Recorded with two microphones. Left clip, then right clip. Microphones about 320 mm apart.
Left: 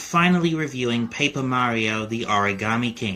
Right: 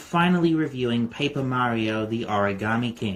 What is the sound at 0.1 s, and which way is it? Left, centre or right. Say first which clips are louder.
Speech: left 1 dB; centre.